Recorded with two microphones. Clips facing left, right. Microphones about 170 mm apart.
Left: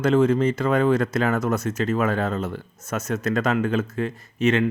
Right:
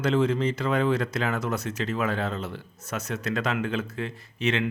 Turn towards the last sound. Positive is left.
turn(degrees=45)  # may be behind; listen again after turning